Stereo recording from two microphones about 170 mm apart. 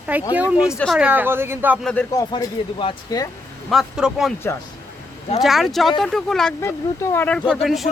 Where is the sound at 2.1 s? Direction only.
25° left (ahead or behind).